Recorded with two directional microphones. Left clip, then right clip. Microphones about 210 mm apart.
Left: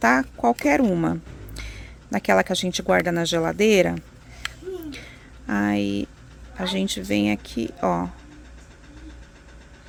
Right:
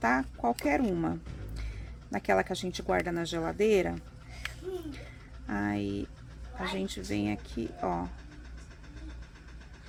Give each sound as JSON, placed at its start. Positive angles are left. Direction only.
{"t": 0.0, "sound": "speech", "side_deg": 40}
{"t": 5.5, "sound": "speech", "side_deg": 40}